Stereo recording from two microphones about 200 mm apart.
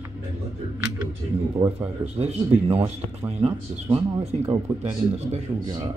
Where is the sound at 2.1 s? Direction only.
30° right (ahead or behind).